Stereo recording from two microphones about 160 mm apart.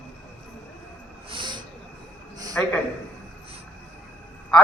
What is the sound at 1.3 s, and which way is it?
Snort, 30° right (ahead or behind).